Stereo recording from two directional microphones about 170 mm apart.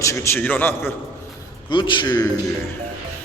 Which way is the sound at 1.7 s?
25° left (ahead or behind).